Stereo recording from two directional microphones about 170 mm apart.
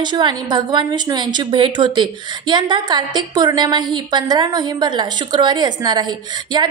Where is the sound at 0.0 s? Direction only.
25° right (ahead or behind).